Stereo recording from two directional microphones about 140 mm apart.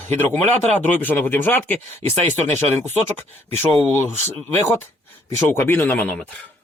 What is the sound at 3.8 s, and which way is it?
Speech, 15° left (ahead or behind).